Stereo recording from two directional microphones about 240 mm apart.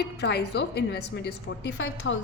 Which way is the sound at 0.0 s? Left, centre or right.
Left.